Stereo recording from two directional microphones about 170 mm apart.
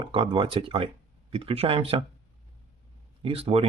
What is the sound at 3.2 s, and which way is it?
Speech, 35° right (ahead or behind).